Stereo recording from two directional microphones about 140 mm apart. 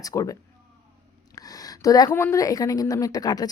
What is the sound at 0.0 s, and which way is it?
Speech, 25° left (ahead or behind).